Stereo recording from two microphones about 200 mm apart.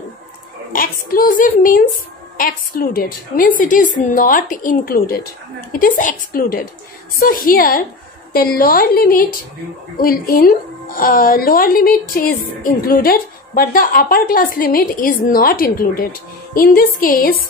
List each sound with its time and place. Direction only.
0.7 s speech: 45° left (ahead or behind)